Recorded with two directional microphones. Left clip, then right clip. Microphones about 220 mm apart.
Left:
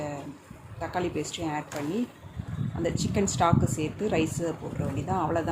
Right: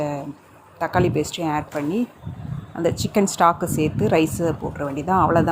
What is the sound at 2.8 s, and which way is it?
Speech, 25° right (ahead or behind).